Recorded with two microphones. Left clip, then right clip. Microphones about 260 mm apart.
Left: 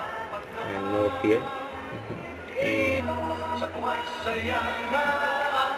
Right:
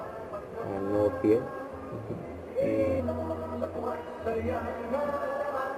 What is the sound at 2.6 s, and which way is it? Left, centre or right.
Music, centre.